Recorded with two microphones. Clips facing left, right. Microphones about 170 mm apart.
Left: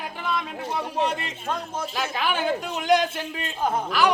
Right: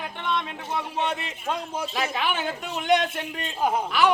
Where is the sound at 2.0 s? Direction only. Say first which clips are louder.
Left 1 dB; centre (ahead or behind).